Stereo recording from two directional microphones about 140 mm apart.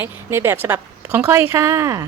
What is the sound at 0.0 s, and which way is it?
A woman's voice, 15° right (ahead or behind).